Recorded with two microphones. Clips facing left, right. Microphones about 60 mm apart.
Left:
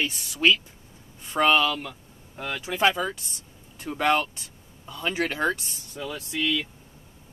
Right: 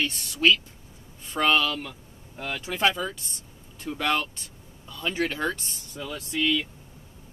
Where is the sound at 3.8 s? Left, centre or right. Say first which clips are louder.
Left 3 dB; left.